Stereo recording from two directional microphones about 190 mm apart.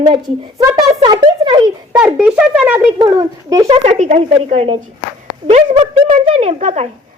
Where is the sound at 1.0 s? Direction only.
25° right (ahead or behind).